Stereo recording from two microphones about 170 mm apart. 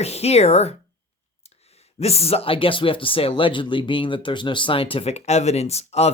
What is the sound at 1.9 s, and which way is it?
Speech, 35° left (ahead or behind).